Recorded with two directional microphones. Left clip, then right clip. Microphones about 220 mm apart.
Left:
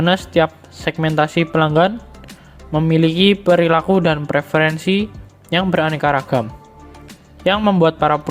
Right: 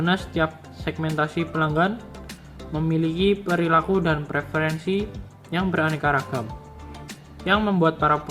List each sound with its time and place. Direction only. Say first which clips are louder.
0.0 s speech: left 8 dB; 35° left (ahead or behind)
6.1 s speech: left 8 dB; centre (ahead or behind)
7.4 s speech: left 6 dB; 30° left (ahead or behind)